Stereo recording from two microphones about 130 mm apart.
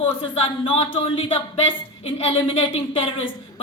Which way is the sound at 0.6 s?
45° left (ahead or behind).